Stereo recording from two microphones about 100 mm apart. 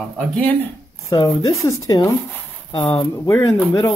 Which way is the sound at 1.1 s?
35° left (ahead or behind).